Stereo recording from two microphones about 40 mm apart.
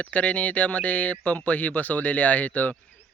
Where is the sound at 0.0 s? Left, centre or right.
Left.